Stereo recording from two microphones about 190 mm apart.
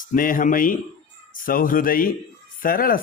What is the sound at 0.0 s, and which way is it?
Speech, 45° left (ahead or behind).